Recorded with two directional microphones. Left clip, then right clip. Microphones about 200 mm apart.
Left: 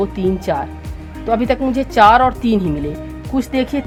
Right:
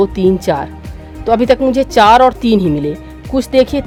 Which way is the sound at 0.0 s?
60° right (ahead or behind).